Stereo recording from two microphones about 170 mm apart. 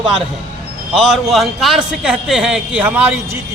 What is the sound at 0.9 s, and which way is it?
A man's voice, centre (ahead or behind).